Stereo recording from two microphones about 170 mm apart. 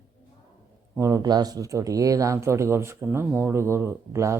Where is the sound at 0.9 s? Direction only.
20° right (ahead or behind).